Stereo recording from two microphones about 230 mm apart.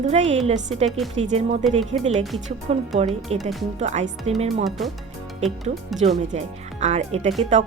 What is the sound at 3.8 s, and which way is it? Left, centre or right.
Speech, right.